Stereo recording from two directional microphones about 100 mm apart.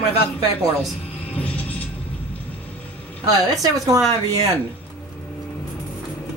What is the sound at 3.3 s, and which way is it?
Speech, 40° right (ahead or behind).